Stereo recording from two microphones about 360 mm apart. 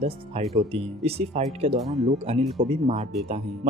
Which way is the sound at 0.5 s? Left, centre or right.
Centre.